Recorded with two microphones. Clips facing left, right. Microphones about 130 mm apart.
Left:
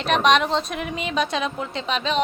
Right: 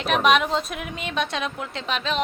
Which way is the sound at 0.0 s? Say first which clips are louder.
Left 1 dB; 5° right (ahead or behind).